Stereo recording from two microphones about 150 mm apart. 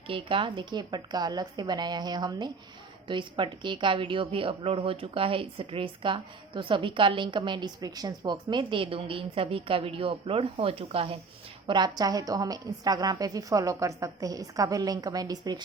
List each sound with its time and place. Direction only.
0.1 s a woman's voice: 35° right (ahead or behind)
11.6 s a woman's voice: 30° right (ahead or behind)